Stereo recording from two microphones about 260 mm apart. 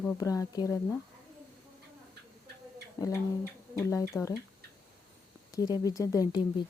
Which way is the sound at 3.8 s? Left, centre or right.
Centre.